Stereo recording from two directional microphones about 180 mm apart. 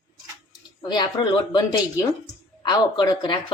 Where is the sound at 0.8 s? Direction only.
25° left (ahead or behind).